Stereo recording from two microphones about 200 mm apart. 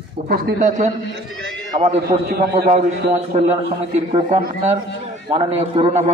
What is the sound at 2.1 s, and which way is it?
Speech, 50° right (ahead or behind).